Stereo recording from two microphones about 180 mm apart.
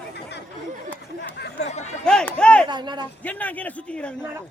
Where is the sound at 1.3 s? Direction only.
65° left (ahead or behind).